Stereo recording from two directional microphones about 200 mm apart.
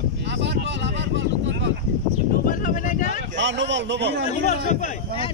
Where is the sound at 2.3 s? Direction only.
45° left (ahead or behind).